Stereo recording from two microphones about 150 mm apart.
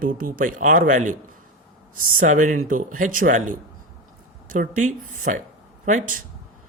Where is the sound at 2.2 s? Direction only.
60° right (ahead or behind).